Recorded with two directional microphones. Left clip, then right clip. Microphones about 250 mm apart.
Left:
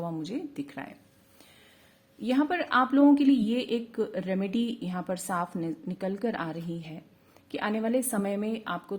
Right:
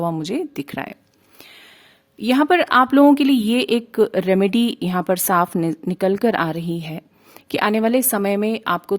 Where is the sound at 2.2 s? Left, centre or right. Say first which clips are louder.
Right 12 dB; right.